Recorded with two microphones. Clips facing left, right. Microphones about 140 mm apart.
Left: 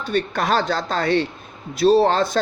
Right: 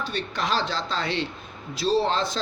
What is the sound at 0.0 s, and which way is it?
A man's voice, 55° left (ahead or behind).